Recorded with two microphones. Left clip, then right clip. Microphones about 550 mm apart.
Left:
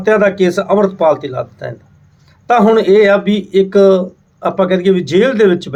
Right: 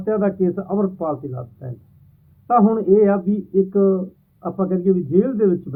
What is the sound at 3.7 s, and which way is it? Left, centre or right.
Speech, centre.